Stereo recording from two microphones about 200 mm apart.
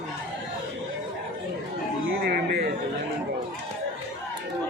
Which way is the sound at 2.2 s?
50° right (ahead or behind).